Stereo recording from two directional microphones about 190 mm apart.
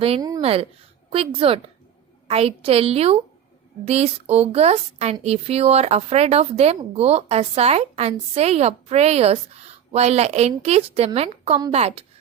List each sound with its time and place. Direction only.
0.2 s a woman's voice: 20° right (ahead or behind)
0.4 s a woman's voice: 30° right (ahead or behind)